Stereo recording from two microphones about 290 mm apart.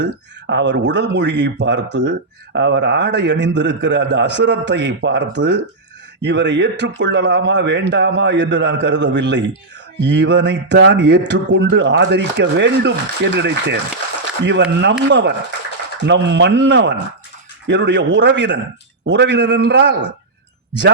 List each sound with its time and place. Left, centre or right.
0.0 s speech: right